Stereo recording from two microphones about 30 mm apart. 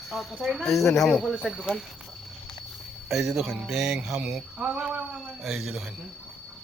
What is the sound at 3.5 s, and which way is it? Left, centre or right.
Speech, centre.